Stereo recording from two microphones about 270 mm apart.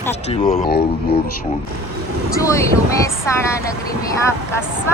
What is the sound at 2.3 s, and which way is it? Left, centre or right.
Speech, centre.